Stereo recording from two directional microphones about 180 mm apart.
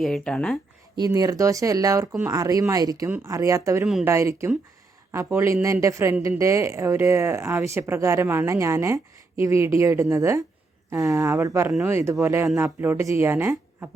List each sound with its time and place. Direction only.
0.0 s speech: 5° left (ahead or behind)
0.9 s speech: 20° right (ahead or behind)